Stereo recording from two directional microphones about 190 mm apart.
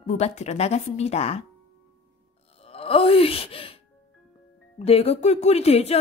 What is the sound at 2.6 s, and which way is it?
Livestock, 30° left (ahead or behind).